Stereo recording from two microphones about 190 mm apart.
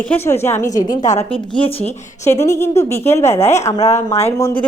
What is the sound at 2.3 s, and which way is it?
A woman's voice, 15° left (ahead or behind).